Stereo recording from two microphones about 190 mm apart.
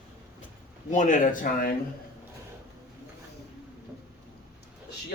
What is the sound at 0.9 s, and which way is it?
Speech, 40° left (ahead or behind).